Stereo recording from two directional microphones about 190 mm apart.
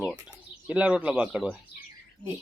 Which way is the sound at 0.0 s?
5° right (ahead or behind).